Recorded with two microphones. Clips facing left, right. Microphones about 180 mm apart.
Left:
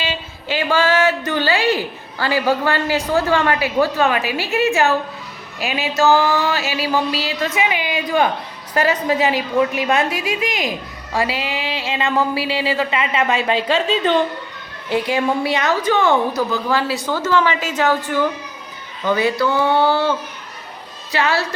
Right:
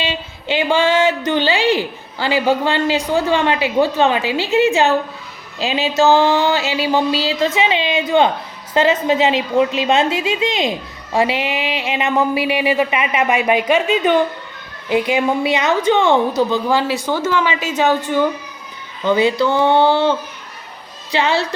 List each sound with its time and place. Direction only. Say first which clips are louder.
0.0 s a woman's voice: right 2 dB; 20° right (ahead or behind)